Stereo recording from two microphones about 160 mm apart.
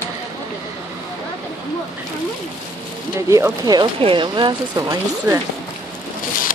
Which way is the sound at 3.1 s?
15° right (ahead or behind).